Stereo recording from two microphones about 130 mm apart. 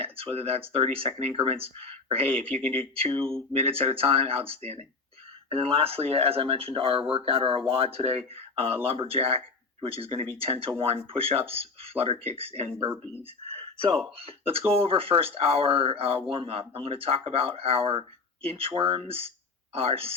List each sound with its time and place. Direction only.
0.0 s speech: 45° right (ahead or behind)
13.4 s a sound: 50° right (ahead or behind)
14.2 s speech: 45° right (ahead or behind)